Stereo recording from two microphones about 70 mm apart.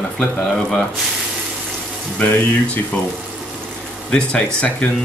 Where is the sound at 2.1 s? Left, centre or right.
Left.